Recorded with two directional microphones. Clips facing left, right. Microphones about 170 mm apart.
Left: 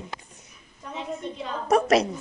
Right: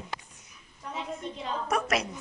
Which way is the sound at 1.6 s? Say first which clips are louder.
Left 9 dB; 35° left (ahead or behind).